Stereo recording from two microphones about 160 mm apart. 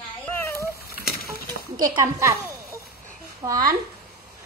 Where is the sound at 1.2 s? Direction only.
25° right (ahead or behind).